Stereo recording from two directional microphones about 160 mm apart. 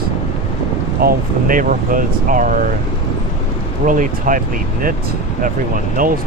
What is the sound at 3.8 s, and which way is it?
Speech, 55° right (ahead or behind).